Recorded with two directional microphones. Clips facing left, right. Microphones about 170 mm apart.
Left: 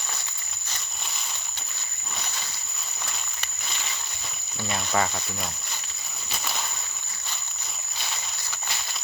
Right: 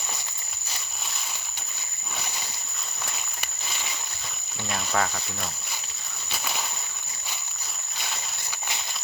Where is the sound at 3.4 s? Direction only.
10° right (ahead or behind).